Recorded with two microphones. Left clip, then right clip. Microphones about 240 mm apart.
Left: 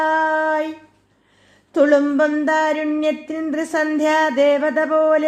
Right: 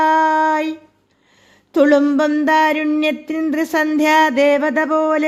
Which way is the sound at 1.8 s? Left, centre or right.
Right.